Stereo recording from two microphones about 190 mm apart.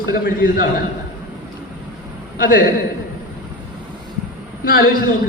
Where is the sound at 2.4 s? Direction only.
50° left (ahead or behind).